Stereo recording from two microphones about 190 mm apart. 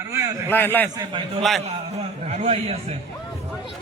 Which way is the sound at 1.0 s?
25° right (ahead or behind).